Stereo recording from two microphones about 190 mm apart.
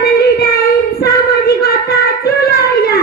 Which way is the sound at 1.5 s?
55° left (ahead or behind).